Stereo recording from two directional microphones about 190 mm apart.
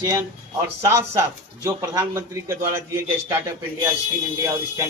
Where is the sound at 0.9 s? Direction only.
15° right (ahead or behind).